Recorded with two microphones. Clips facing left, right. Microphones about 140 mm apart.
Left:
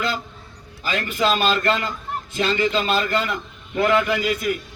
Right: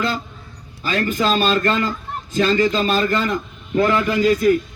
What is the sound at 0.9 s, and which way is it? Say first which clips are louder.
A man's voice: right 2 dB; 35° right (ahead or behind).